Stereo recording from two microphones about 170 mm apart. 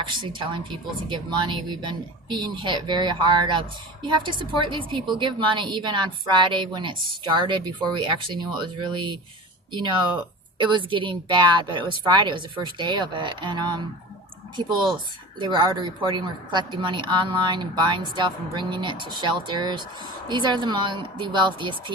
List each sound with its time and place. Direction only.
0.1 s speech: 30° right (ahead or behind)
10.6 s speech: 30° right (ahead or behind)